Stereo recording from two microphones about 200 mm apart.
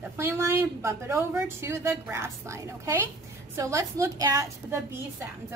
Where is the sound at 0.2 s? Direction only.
15° right (ahead or behind).